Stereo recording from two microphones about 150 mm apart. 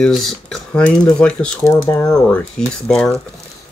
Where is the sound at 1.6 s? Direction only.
15° left (ahead or behind).